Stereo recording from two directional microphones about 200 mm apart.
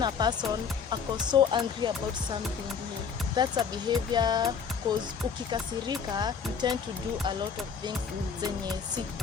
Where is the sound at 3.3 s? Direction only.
20° right (ahead or behind).